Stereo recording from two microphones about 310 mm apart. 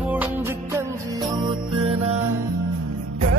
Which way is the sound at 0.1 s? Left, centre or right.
Centre.